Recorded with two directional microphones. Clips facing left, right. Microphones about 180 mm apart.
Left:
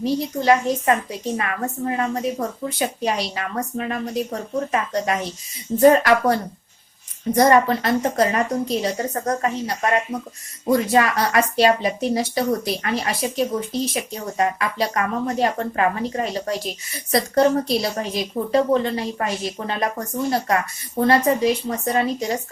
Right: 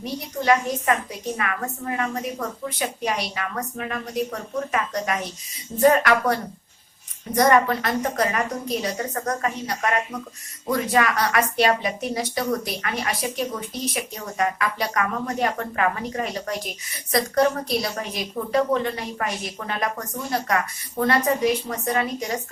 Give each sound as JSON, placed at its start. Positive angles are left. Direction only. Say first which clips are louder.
{"t": 0.0, "sound": "a woman's voice", "louder": "left 6 dB", "side_deg": 30}
{"t": 7.3, "sound": "a woman's voice", "louder": "left 2 dB", "side_deg": 30}